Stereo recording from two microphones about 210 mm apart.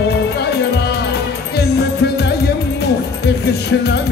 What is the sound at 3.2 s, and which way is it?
Music, 50° left (ahead or behind).